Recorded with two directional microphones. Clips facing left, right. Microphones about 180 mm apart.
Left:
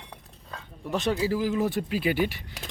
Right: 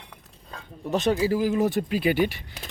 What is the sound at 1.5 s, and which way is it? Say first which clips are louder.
Speech: right 3 dB; 45° right (ahead or behind).